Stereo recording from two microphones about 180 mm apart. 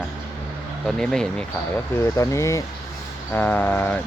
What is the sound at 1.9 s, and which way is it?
Speech, 15° left (ahead or behind).